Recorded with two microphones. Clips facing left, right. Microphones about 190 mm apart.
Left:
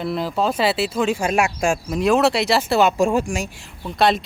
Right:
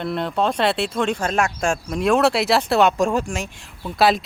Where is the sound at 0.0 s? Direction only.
Centre (ahead or behind).